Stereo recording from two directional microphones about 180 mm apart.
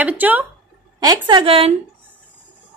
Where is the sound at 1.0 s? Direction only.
25° right (ahead or behind).